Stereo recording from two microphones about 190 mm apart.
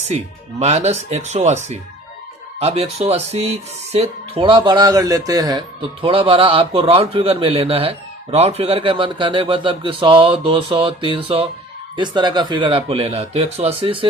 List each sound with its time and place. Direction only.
0.6 s speech: 35° right (ahead or behind)